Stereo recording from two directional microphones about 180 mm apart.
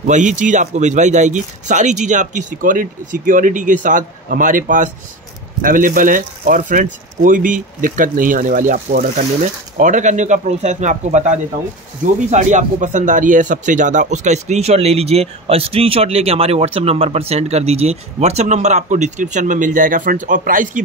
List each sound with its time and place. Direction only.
0.0 s speech: 45° right (ahead or behind)